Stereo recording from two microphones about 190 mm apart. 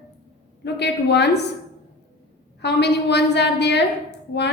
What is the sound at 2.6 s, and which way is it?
A woman's voice, 60° left (ahead or behind).